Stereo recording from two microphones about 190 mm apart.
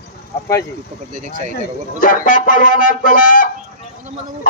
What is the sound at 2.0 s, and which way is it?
A man's voice, 45° left (ahead or behind).